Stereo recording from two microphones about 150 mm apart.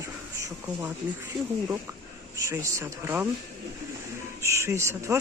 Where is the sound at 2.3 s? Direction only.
20° right (ahead or behind).